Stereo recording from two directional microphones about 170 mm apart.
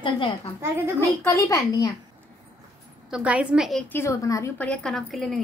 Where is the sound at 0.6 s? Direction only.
15° right (ahead or behind).